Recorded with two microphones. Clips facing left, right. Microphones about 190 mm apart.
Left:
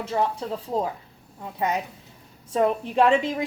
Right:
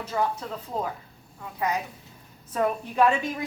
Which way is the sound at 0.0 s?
25° left (ahead or behind).